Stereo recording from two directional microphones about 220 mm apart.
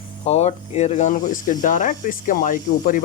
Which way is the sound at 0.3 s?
30° left (ahead or behind).